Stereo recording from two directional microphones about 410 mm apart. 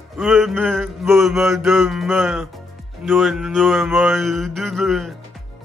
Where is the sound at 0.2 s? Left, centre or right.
Centre.